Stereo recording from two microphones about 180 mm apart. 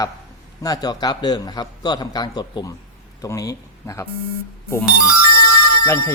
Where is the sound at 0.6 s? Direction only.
20° left (ahead or behind).